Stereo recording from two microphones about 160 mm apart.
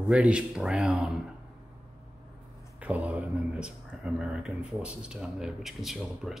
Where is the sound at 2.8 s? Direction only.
10° right (ahead or behind).